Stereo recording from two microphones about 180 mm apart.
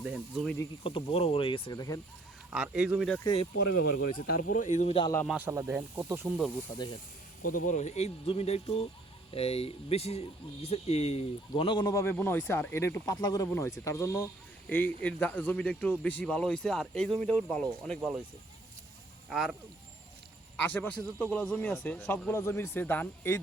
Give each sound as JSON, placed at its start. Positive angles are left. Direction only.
{"t": 0.0, "sound": "speech", "side_deg": 0}
{"t": 0.9, "sound": "speech", "side_deg": 30}
{"t": 2.5, "sound": "speech", "side_deg": -5}
{"t": 4.3, "sound": "speech", "side_deg": 50}
{"t": 5.3, "sound": "speech", "side_deg": -10}
{"t": 6.7, "sound": "speech", "side_deg": 25}
{"t": 7.5, "sound": "speech", "side_deg": 45}
{"t": 19.3, "sound": "speech", "side_deg": 0}
{"t": 20.6, "sound": "speech", "side_deg": 10}